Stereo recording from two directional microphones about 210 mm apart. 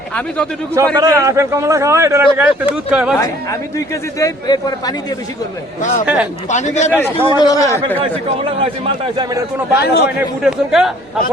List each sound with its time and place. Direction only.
0.9 s a man's voice: 15° right (ahead or behind)
3.8 s a man's voice: 15° left (ahead or behind)
5.8 s a man's voice: 35° left (ahead or behind)
7.3 s a man's voice: 20° left (ahead or behind)
9.7 s a man's voice: 50° left (ahead or behind)
10.4 s speech: centre (ahead or behind)